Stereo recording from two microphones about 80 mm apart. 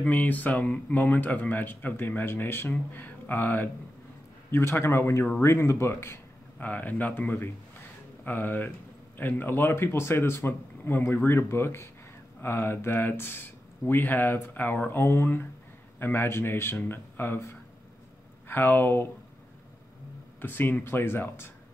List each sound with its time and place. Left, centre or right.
0.0 s speech: centre
6.6 s speech: left
18.5 s speech: left
20.3 s speech: left